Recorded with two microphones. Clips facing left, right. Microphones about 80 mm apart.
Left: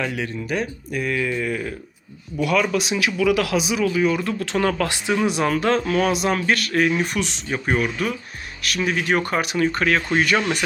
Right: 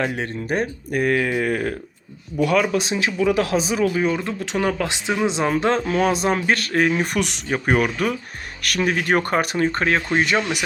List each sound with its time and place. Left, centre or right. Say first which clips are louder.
0.0 s speech: right 2 dB; right
2.4 s speech: right 2 dB; right
9.6 s speech: even; right